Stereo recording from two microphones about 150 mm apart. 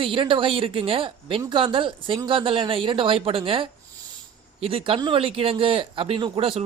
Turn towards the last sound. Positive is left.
turn(degrees=-35)  # may be behind; listen again after turning